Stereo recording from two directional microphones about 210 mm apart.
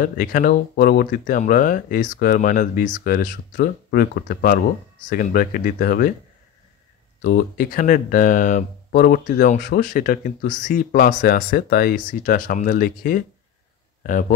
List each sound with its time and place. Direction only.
0.0 s speech: 40° left (ahead or behind)
7.2 s speech: 45° left (ahead or behind)